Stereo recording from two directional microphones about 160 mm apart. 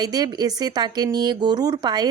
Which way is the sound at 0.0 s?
25° right (ahead or behind).